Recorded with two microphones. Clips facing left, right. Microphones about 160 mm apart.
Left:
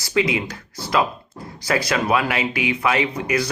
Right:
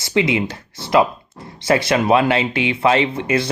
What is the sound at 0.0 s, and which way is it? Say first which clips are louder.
Speech: right 3 dB; 25° right (ahead or behind).